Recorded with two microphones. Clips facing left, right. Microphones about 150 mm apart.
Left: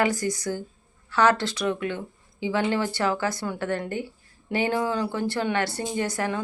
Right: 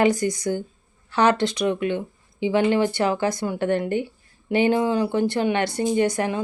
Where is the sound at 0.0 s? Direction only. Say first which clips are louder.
Right 5 dB; 20° right (ahead or behind).